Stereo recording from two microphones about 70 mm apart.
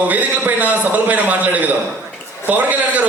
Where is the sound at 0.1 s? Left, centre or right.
Right.